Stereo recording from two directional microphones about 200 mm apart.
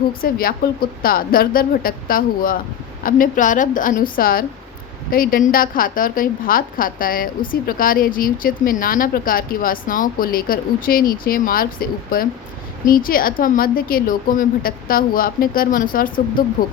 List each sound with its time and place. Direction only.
0.1 s a woman's voice: 45° left (ahead or behind)